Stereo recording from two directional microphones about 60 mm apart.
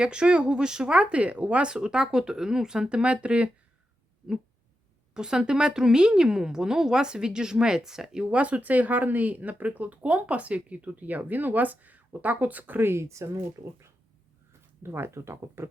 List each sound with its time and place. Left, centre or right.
0.0 s speech: centre
5.1 s speech: centre; by 13.2 s right
14.8 s speech: right